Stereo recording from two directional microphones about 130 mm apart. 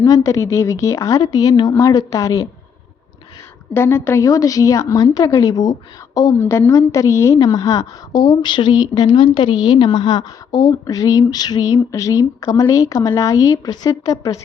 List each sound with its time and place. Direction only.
0.0 s a woman's voice: 25° left (ahead or behind)
3.8 s a woman's voice: 20° left (ahead or behind)